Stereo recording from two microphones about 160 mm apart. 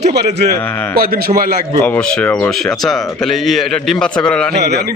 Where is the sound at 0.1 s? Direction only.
90° right.